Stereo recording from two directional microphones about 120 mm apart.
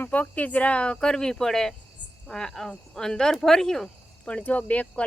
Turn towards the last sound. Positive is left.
turn(degrees=10)  # may be behind; listen again after turning